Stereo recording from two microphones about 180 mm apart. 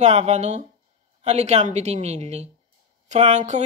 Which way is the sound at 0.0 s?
40° right (ahead or behind).